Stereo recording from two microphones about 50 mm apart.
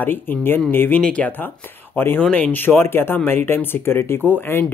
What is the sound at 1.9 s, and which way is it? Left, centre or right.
Speech, left.